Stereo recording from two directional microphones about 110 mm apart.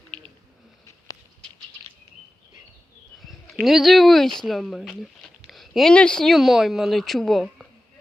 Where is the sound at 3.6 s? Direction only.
Centre (ahead or behind).